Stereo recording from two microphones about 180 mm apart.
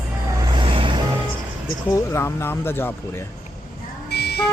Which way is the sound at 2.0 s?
15° left (ahead or behind).